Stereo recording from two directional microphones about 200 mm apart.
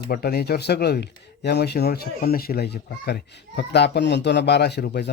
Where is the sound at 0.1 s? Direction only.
50° left (ahead or behind).